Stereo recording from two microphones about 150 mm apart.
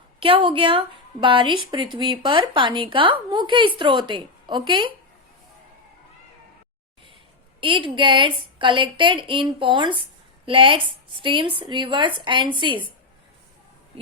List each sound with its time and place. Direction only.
0.2 s speech: 35° right (ahead or behind)
7.6 s speech: 35° right (ahead or behind)